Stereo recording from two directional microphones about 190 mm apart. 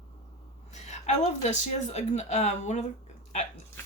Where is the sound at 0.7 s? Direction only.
35° left (ahead or behind).